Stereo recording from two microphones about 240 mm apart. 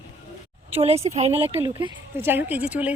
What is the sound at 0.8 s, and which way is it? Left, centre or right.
Speech, right.